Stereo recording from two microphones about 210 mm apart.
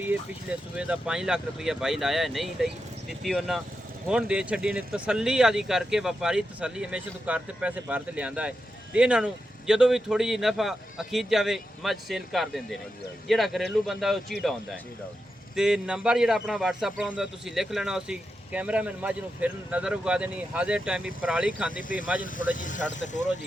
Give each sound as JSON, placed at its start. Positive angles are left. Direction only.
{"t": 0.8, "sound": "speech", "side_deg": -5}
{"t": 15.5, "sound": "speech", "side_deg": -5}
{"t": 21.8, "sound": "speech", "side_deg": 40}